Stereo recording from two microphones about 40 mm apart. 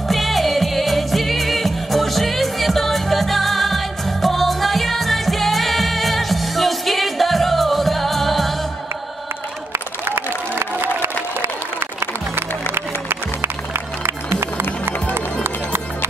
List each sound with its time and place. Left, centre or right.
0.1 s music: centre
9.7 s a sound: right
11.0 s crowd: right
12.7 s music: right
15.4 s music: right